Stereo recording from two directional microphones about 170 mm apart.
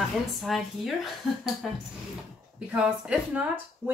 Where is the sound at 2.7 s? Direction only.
5° right (ahead or behind).